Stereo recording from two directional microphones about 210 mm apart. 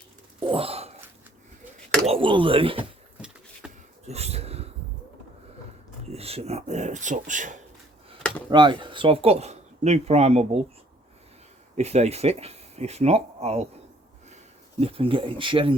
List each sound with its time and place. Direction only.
0.4 s a sound: 25° right (ahead or behind)
2.0 s speech: 25° right (ahead or behind)
3.2 s vehicle: 5° right (ahead or behind)
4.0 s a sound: 30° right (ahead or behind)
6.1 s speech: 30° right (ahead or behind)
8.4 s speech: 20° right (ahead or behind)
11.8 s speech: 30° right (ahead or behind)
14.8 s speech: 25° right (ahead or behind)